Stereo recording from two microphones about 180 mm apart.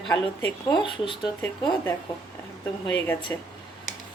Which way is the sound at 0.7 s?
25° left (ahead or behind).